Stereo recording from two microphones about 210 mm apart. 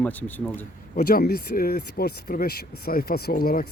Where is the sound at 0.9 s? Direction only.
45° left (ahead or behind).